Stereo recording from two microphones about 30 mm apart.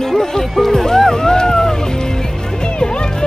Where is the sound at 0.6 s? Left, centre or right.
Centre.